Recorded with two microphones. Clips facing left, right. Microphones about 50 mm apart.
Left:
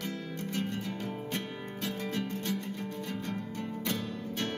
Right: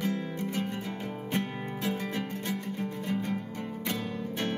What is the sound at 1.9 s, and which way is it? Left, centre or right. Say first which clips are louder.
Music: right 1 dB; right.